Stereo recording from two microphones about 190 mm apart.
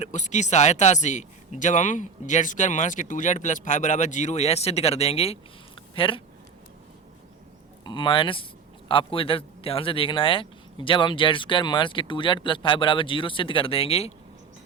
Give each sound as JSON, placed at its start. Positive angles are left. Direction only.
{"t": 0.0, "sound": "speech", "side_deg": 40}
{"t": 7.9, "sound": "speech", "side_deg": 25}